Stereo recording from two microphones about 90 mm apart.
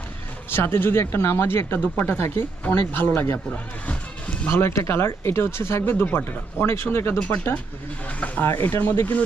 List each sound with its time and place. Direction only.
0.5 s speech: 25° left (ahead or behind)
4.5 s speech: 30° left (ahead or behind)
8.4 s speech: 25° left (ahead or behind)